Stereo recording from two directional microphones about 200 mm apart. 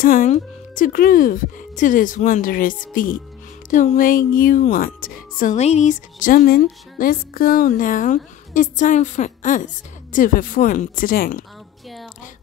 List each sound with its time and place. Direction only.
0.0 s speech: 40° left (ahead or behind)